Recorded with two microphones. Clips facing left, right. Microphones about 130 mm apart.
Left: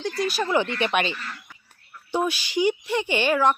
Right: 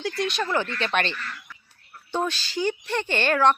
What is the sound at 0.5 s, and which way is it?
Speech, 15° left (ahead or behind).